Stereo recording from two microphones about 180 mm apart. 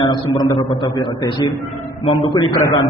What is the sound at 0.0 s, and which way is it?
A man's voice, 25° left (ahead or behind).